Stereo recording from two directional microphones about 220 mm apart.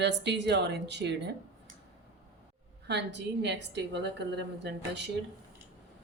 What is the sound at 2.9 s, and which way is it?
Speech, 50° right (ahead or behind).